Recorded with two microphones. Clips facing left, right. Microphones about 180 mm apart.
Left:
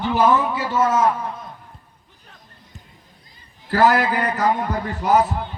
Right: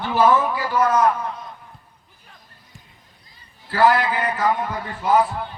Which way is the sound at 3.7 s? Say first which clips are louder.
Left 1 dB; 40° left (ahead or behind).